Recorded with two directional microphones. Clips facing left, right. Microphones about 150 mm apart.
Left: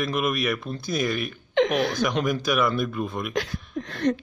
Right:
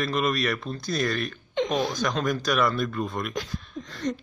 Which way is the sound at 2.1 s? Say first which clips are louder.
Left 1 dB; 10° left (ahead or behind).